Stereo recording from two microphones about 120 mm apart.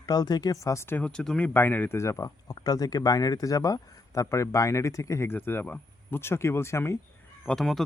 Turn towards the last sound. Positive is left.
turn(degrees=5)  # may be behind; listen again after turning